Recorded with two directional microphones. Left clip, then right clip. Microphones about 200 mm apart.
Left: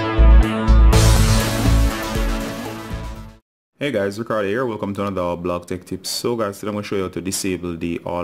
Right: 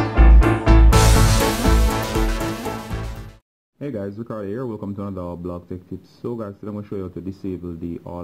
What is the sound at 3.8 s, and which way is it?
Speech, 25° left (ahead or behind).